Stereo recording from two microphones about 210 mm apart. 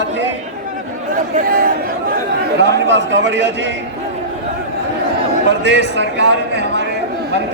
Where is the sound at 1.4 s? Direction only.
45° right (ahead or behind).